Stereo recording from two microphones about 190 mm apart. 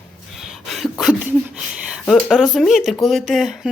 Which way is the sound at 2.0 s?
Centre (ahead or behind).